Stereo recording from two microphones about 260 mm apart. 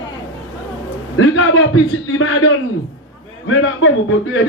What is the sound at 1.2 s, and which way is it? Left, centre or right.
A man's voice, left.